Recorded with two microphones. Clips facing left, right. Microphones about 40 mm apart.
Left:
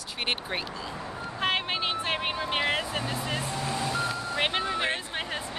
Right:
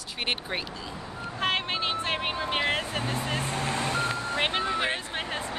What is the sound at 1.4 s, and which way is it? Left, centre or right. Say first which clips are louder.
Vehicle: even; centre.